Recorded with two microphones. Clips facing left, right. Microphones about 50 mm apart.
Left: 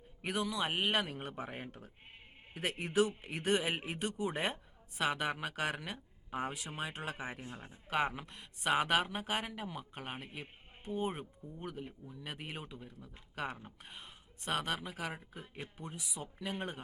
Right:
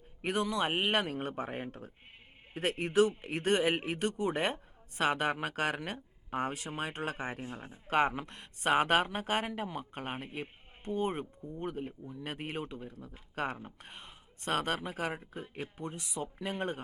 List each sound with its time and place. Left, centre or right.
0.2 s a man's voice: right
7.4 s speech: right
7.9 s speech: right
10.8 s speech: right
15.4 s speech: right
15.8 s a man's voice: right